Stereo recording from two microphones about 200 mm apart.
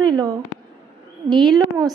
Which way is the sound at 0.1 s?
15° right (ahead or behind).